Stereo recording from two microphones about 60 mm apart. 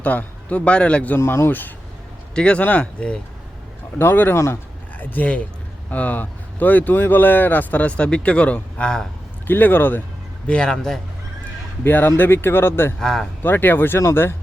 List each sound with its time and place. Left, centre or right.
0.0 s speech: left
1.2 s speech: left
1.5 s speech: left
2.3 s speech: centre
3.9 s speech: left
9.5 s speech: left
10.4 s speech: centre
11.8 s speech: left
13.0 s speech: centre
13.4 s speech: left